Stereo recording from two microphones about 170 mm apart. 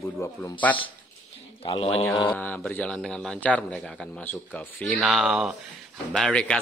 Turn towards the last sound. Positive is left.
turn(degrees=5)  # may be behind; listen again after turning